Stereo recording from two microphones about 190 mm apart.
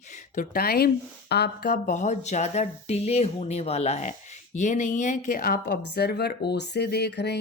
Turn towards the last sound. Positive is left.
turn(degrees=60)  # may be behind; listen again after turning